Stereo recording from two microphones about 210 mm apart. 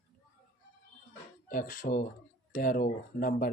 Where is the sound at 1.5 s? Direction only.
40° left (ahead or behind).